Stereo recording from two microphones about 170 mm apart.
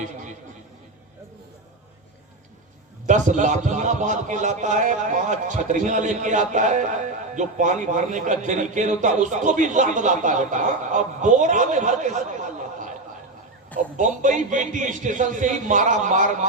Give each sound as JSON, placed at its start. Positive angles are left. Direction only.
{"t": 3.1, "sound": "a man's voice", "side_deg": -45}
{"t": 13.9, "sound": "a man's voice", "side_deg": -45}